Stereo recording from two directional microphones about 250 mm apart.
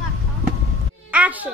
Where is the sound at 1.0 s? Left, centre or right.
Centre.